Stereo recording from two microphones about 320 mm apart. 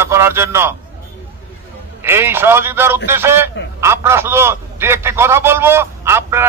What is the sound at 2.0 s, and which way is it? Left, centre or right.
A man's voice, centre.